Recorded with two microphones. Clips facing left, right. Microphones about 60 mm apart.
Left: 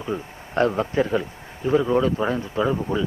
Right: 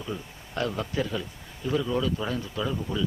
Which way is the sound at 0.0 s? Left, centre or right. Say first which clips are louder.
Left 7 dB; left.